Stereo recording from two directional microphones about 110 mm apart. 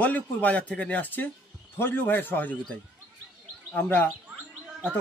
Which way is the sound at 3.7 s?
20° left (ahead or behind).